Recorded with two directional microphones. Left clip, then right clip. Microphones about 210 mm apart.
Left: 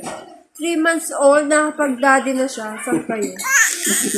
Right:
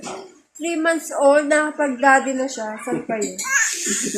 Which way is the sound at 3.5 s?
40° left (ahead or behind).